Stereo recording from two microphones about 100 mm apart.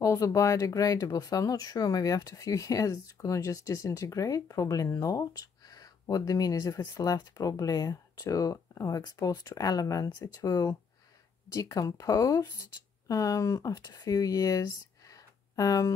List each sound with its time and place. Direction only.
0.0 s speech: 30° left (ahead or behind)